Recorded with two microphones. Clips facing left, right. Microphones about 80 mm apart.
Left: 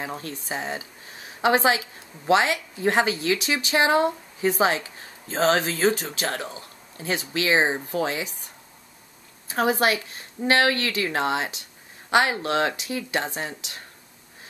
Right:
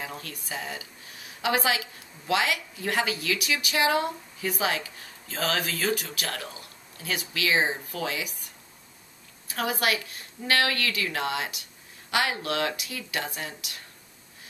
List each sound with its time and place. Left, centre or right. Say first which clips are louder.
0.0 s a woman's voice: left 5 dB; left
9.5 s speech: left 6 dB; left